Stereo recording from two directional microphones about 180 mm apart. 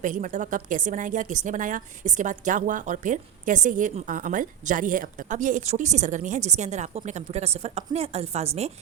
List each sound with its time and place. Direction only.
0.0 s a woman's voice: 45° right (ahead or behind)